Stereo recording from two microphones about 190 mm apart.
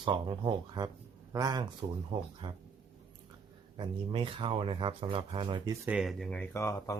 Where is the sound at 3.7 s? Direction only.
25° right (ahead or behind).